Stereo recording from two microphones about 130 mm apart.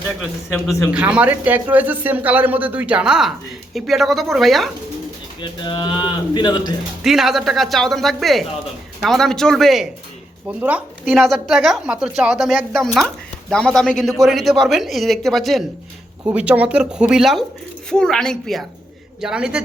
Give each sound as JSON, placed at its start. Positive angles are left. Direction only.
{"t": 0.9, "sound": "a man's voice", "side_deg": -10}
{"t": 5.4, "sound": "speech", "side_deg": 35}
{"t": 7.0, "sound": "speech", "side_deg": 0}
{"t": 10.6, "sound": "a man's voice", "side_deg": -10}
{"t": 11.1, "sound": "speech", "side_deg": 0}
{"t": 16.3, "sound": "a man's voice", "side_deg": -10}